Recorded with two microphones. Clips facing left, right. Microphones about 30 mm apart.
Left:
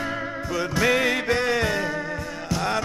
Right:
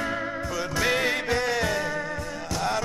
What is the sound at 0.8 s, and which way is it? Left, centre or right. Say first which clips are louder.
Music: left 4 dB; left.